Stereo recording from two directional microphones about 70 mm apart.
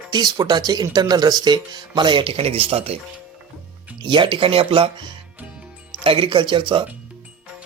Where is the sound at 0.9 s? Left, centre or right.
Right.